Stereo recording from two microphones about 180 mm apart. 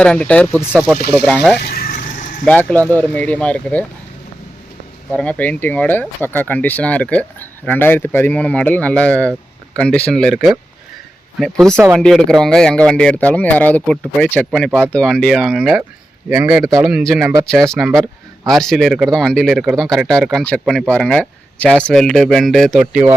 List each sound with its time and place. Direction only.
0.0 s speech: 5° left (ahead or behind)
0.7 s speech: 5° right (ahead or behind)
1.1 s speech: 5° left (ahead or behind)
1.5 s vehicle: 60° left (ahead or behind)
2.4 s speech: 5° left (ahead or behind)
5.1 s speech: 10° left (ahead or behind)
17.1 s speech: centre (ahead or behind)